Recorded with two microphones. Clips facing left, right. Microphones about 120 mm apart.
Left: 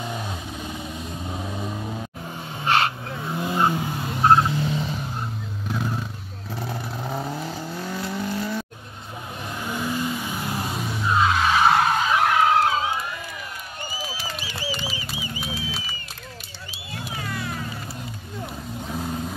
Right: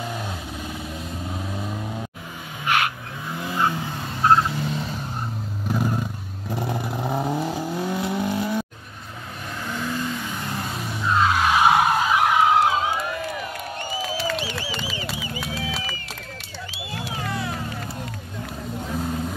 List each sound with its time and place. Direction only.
2.6 s vehicle: 30° left (ahead or behind)
4.6 s vehicle: centre (ahead or behind)
5.7 s vehicle: 10° right (ahead or behind)
9.7 s vehicle: 15° left (ahead or behind); by 12.9 s 5° right (ahead or behind)
14.0 s a sound: 80° right
15.6 s crowd: 60° right (ahead or behind)